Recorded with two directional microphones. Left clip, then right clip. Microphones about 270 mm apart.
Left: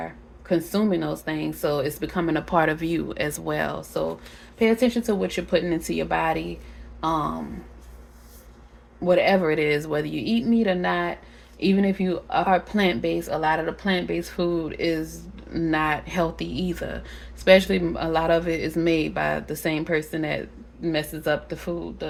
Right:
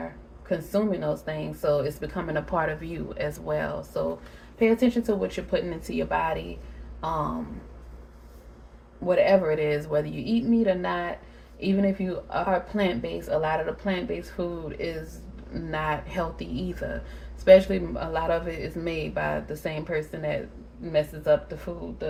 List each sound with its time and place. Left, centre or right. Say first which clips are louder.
0.4 s speech: left 3 dB; left
9.0 s speech: left 1 dB; left